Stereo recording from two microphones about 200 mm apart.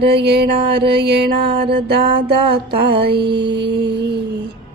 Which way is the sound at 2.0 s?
25° right (ahead or behind).